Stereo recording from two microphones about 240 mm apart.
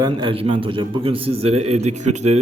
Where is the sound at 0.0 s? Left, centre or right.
Centre.